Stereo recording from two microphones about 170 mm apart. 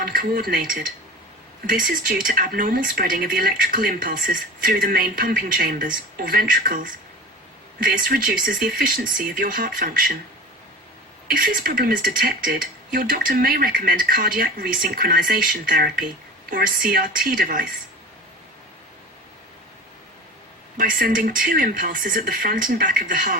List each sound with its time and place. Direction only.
0.0 s speech: 60° right (ahead or behind)
7.9 s speech: 55° right (ahead or behind)
11.3 s speech: 60° right (ahead or behind)
20.7 s speech: 55° right (ahead or behind)